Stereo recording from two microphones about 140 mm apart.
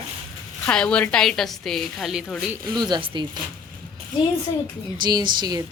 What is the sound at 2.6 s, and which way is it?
Speech, 30° right (ahead or behind).